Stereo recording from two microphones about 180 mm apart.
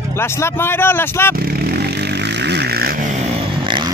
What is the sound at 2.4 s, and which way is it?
Vehicle, 70° right (ahead or behind).